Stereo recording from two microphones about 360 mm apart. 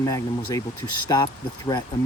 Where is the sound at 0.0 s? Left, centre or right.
Centre.